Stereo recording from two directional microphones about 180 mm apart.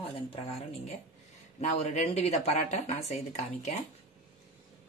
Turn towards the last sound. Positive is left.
turn(degrees=40)  # may be behind; listen again after turning